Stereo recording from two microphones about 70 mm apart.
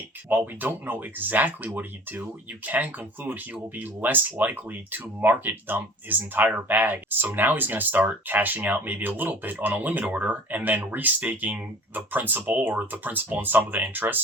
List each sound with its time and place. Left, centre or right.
0.3 s speech: right